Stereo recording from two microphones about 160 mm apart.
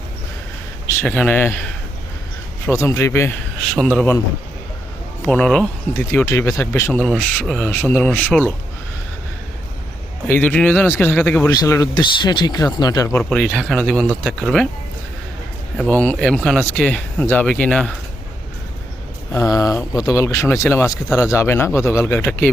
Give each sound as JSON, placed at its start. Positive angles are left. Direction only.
{"t": 0.9, "sound": "speech", "side_deg": 5}
{"t": 2.6, "sound": "speech", "side_deg": 20}
{"t": 3.8, "sound": "speech", "side_deg": 5}
{"t": 5.2, "sound": "speech", "side_deg": 10}
{"t": 6.1, "sound": "speech", "side_deg": 15}
{"t": 10.2, "sound": "speech", "side_deg": 10}
{"t": 13.1, "sound": "speech", "side_deg": 5}
{"t": 15.9, "sound": "speech", "side_deg": 10}
{"t": 19.3, "sound": "speech", "side_deg": 20}